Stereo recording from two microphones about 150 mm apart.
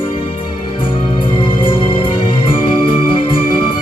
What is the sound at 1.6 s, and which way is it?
Music, 35° left (ahead or behind).